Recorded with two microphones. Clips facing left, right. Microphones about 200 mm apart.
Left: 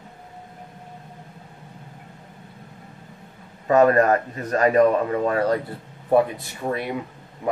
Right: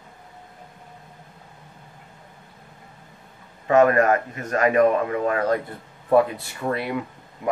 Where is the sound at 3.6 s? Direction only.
35° left (ahead or behind).